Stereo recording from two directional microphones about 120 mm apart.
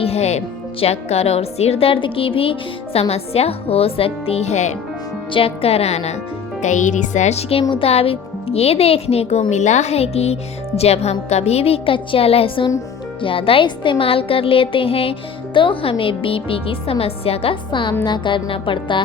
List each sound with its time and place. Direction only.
0.0 s a woman's voice: 60° left (ahead or behind)
5.3 s a woman's voice: 55° left (ahead or behind)
6.6 s music: 90° left; by 7.6 s 65° left (ahead or behind)
7.7 s a woman's voice: 55° left (ahead or behind)
9.5 s a woman's voice: 75° left (ahead or behind); by 19.0 s 45° left (ahead or behind)